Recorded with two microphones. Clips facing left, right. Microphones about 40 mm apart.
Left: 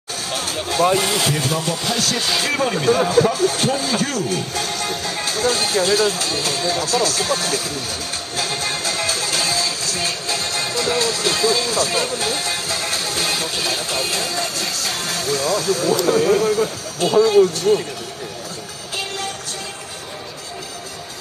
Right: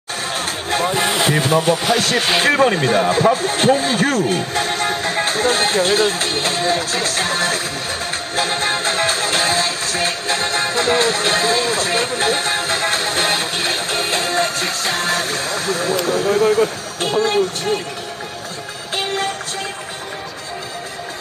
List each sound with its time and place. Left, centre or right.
0.3 s a sound: right
0.9 s speech: right
8.4 s music: right
18.9 s music: right